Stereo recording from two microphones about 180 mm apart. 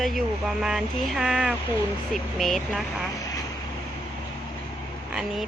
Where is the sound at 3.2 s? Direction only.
20° left (ahead or behind).